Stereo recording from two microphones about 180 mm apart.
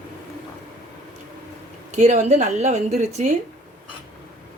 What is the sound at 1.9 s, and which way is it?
A woman's voice, 40° right (ahead or behind).